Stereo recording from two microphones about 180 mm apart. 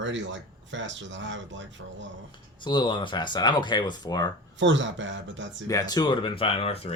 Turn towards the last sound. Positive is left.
turn(degrees=35)  # may be behind; listen again after turning